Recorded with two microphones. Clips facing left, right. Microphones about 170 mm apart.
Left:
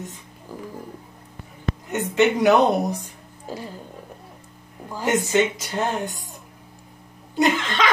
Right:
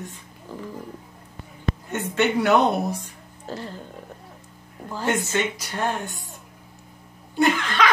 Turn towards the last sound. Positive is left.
turn(degrees=25)  # may be behind; listen again after turning